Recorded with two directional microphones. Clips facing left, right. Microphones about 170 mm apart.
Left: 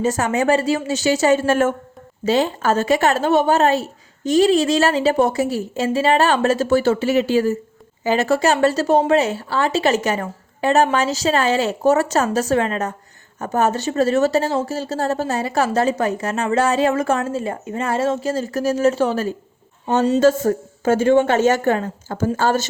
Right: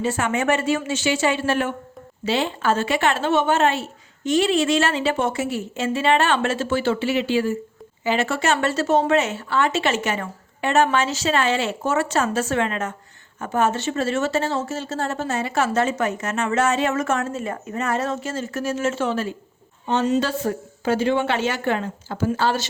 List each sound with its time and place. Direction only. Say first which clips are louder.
0.0 s a woman's voice: left 4 dB; 40° left (ahead or behind)